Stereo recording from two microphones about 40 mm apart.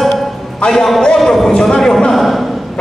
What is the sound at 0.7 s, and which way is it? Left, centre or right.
A man's voice, centre.